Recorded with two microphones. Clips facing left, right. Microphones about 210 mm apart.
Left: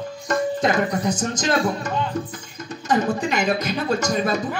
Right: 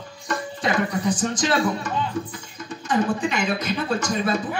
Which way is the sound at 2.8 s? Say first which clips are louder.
Left 1 dB; 40° left (ahead or behind).